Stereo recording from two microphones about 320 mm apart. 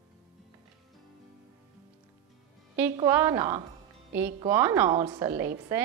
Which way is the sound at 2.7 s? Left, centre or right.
Centre.